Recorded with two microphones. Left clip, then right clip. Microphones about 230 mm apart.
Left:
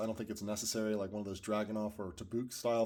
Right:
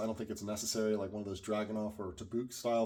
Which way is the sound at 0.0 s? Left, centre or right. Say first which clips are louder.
Right 1 dB; left.